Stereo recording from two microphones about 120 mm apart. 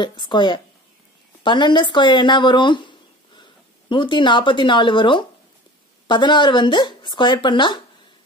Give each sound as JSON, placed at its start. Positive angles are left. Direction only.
{"t": 0.0, "sound": "speech", "side_deg": 40}
{"t": 3.9, "sound": "speech", "side_deg": 40}